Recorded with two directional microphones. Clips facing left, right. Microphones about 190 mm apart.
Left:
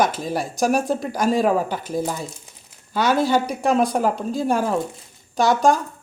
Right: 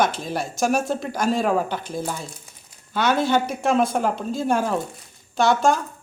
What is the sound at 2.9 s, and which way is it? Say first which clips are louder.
Speech: left 1 dB; 5° left (ahead or behind).